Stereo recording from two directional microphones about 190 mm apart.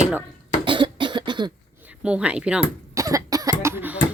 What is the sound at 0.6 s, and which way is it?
Cough, 25° right (ahead or behind).